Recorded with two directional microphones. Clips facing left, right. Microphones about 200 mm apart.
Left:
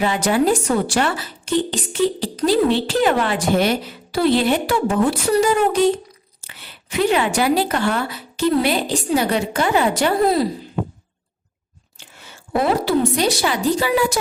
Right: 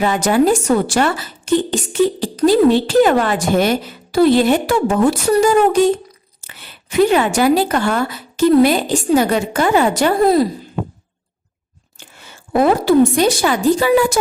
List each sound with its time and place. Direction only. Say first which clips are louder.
0.0 s speech: right 3 dB; 45° right (ahead or behind)
7.1 s speech: right 4 dB; 45° right (ahead or behind)
12.6 s speech: right 6 dB; 50° right (ahead or behind)